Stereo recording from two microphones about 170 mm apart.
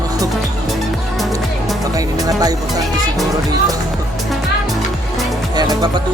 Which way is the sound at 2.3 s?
20° right (ahead or behind).